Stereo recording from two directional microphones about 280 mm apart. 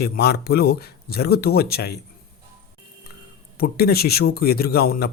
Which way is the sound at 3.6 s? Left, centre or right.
Left.